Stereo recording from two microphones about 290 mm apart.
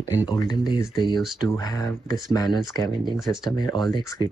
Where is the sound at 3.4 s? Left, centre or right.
Centre.